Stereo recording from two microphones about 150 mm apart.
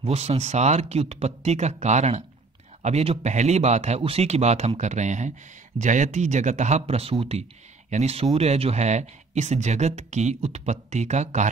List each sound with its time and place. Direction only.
0.0 s speech: 45° right (ahead or behind)